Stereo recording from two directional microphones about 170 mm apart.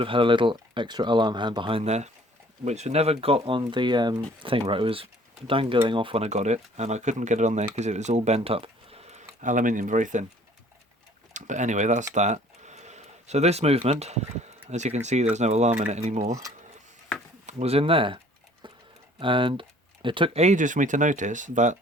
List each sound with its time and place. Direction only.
0.0 s speech: 30° right (ahead or behind); by 10.2 s 45° right (ahead or behind)
11.3 s speech: 45° right (ahead or behind)
12.1 s a sound: 45° right (ahead or behind)
14.7 s speech: 40° right (ahead or behind)
17.4 s speech: 35° right (ahead or behind)
18.6 s tick-tock: 30° right (ahead or behind)
19.2 s speech: 30° right (ahead or behind); by 21.8 s 45° right (ahead or behind)